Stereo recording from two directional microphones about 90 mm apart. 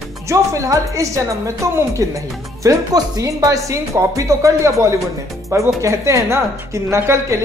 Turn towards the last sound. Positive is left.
turn(degrees=-30)  # may be behind; listen again after turning